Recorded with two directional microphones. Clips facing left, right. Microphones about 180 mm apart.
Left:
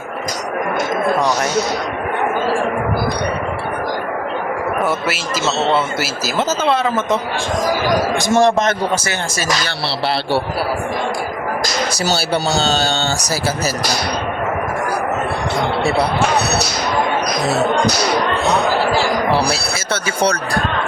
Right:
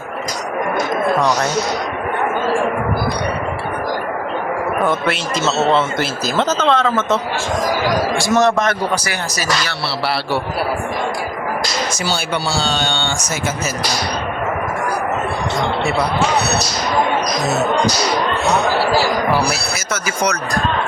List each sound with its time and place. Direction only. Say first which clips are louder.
4.8 s speech: right 1 dB; 5° left (ahead or behind)
6.8 s a man's voice: even; 20° left (ahead or behind)
8.2 s a man's voice: left 1 dB; 25° left (ahead or behind)
12.0 s speech: left 5 dB; 40° left (ahead or behind)
19.4 s speech: left 1 dB; 30° left (ahead or behind)